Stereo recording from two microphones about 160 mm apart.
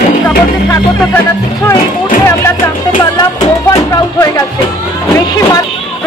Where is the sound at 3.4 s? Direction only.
20° left (ahead or behind).